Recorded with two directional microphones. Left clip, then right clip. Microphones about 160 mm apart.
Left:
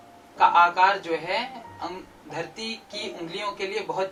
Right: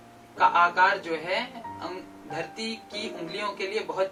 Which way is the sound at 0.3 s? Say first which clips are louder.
Left 3 dB; centre (ahead or behind).